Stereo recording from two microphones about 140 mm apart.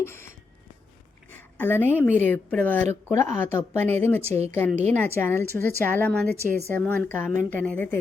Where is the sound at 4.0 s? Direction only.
15° left (ahead or behind).